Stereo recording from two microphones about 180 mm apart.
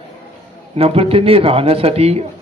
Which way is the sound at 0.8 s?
35° right (ahead or behind).